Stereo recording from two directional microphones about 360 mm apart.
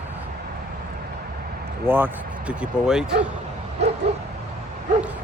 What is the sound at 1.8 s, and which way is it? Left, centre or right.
Speech, centre.